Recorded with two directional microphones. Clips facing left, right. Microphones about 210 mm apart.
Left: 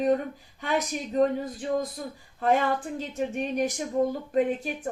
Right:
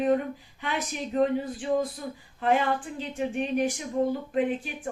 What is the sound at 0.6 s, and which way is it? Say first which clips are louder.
Speech: left 4 dB; 40° left (ahead or behind).